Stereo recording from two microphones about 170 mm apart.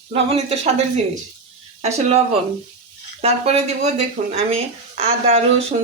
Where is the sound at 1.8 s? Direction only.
40° right (ahead or behind).